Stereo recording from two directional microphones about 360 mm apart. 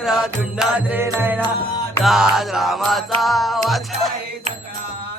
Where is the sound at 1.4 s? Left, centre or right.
Centre.